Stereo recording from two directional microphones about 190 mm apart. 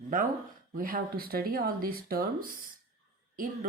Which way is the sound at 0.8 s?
50° right (ahead or behind).